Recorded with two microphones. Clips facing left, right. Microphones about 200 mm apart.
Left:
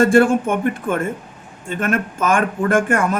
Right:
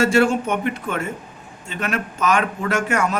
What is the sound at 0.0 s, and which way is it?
Speech, 50° left (ahead or behind).